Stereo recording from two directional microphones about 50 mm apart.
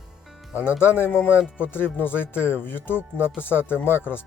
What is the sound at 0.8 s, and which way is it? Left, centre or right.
Speech, left.